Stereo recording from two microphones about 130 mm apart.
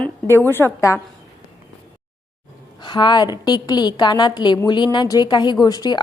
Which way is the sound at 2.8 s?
35° left (ahead or behind).